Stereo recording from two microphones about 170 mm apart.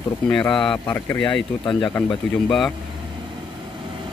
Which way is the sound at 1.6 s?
30° left (ahead or behind).